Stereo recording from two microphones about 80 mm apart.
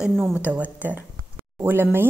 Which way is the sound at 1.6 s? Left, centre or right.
Right.